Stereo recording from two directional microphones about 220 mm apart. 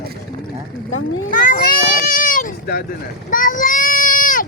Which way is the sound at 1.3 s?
35° left (ahead or behind).